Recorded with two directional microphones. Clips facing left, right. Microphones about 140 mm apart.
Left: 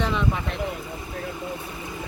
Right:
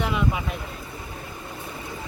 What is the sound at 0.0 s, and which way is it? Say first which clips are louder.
Speech: even; 10° right (ahead or behind).